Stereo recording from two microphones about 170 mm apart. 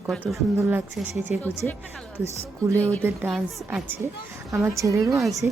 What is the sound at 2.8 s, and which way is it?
Speech, 10° left (ahead or behind).